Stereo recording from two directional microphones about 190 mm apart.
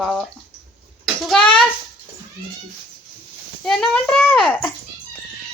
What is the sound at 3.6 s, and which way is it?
A woman's voice, 5° left (ahead or behind).